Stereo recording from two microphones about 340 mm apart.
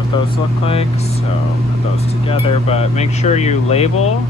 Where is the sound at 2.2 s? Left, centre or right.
Centre.